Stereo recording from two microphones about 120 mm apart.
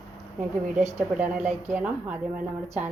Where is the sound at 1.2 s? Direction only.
10° right (ahead or behind).